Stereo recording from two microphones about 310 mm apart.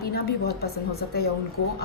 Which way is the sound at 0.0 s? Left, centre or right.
Left.